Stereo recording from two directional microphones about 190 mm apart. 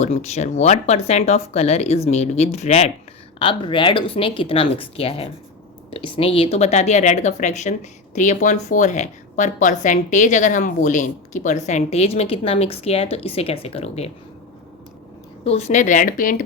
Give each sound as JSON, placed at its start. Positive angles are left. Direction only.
{"t": 0.0, "sound": "a woman's voice", "side_deg": 35}
{"t": 15.4, "sound": "a woman's voice", "side_deg": 35}